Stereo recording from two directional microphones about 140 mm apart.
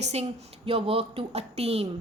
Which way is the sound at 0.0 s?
50° right (ahead or behind).